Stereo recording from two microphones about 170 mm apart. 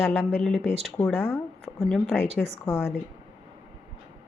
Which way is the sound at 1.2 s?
15° left (ahead or behind).